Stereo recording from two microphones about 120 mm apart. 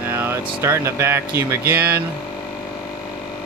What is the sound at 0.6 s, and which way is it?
Speech, 20° right (ahead or behind).